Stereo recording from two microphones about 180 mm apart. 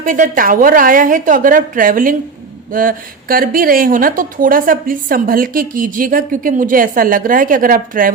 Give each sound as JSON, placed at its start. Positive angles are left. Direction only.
{"t": 0.0, "sound": "a woman's voice", "side_deg": -45}